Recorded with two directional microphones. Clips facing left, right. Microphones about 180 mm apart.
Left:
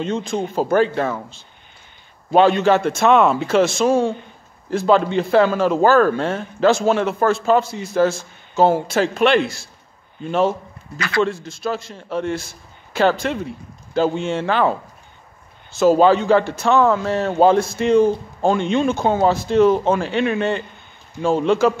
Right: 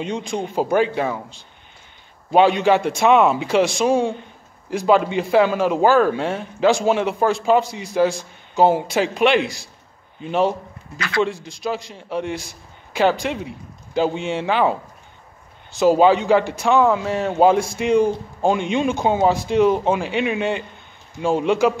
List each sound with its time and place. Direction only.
0.0 s a man's voice: 15° right (ahead or behind)